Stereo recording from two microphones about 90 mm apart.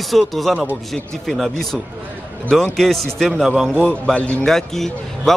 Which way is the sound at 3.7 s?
10° left (ahead or behind).